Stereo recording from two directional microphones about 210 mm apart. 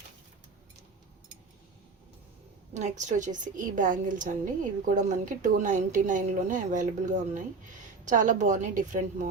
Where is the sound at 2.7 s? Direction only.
35° right (ahead or behind).